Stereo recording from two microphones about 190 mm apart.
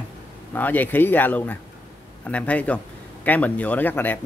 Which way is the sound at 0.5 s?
10° left (ahead or behind).